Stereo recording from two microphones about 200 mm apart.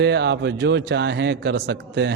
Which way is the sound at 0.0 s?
60° right (ahead or behind).